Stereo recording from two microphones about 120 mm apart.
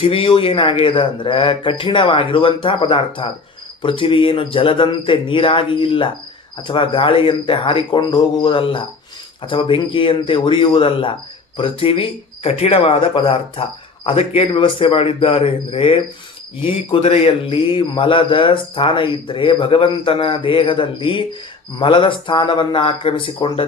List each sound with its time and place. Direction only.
0.0 s a man's voice: 45° left (ahead or behind)